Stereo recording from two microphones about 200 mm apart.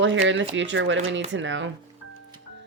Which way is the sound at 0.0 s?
65° right (ahead or behind).